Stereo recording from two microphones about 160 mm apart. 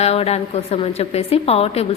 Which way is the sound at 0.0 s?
40° left (ahead or behind).